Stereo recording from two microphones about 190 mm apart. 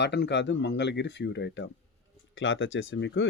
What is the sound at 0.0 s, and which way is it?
Speech, 65° left (ahead or behind).